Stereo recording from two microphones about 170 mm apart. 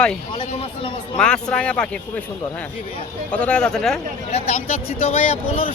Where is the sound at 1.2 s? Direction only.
5° left (ahead or behind).